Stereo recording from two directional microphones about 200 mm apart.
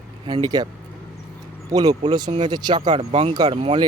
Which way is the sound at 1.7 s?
20° right (ahead or behind).